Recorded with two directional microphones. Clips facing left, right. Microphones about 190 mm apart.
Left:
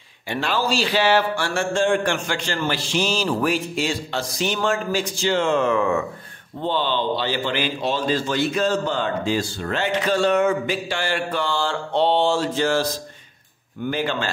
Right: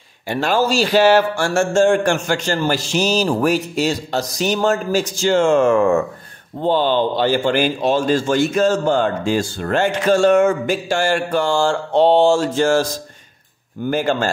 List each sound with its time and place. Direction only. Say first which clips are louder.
0.3 s a man's voice: right 5 dB; 45° right (ahead or behind)
13.8 s a man's voice: right 6 dB; 45° right (ahead or behind)